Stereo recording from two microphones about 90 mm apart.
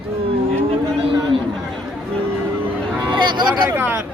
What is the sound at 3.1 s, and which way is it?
Vehicle, 55° right (ahead or behind).